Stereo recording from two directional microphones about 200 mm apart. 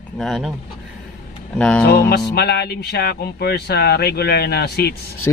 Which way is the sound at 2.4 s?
55° left (ahead or behind).